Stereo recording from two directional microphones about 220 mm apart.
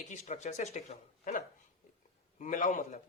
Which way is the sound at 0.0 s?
30° left (ahead or behind).